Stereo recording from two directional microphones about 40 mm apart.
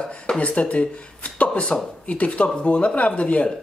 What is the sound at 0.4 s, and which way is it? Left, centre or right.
Speech, left.